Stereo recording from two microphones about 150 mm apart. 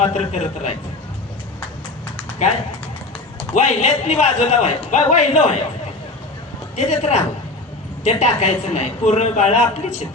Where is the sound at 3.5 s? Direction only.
50° left (ahead or behind).